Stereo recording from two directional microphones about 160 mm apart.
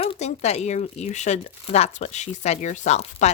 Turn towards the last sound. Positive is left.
turn(degrees=45)  # may be behind; listen again after turning